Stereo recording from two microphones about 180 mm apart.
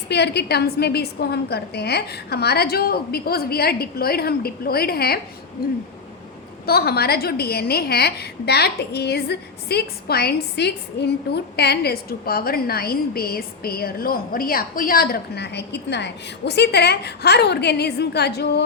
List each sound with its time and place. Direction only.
0.1 s a woman's voice: 65° left (ahead or behind)
6.7 s a woman's voice: 60° left (ahead or behind)